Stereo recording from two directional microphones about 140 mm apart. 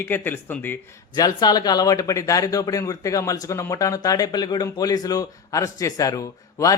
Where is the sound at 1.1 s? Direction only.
30° left (ahead or behind).